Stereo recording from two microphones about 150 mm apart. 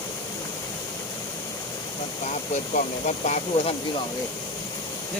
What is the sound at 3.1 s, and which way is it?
Speech, 50° left (ahead or behind).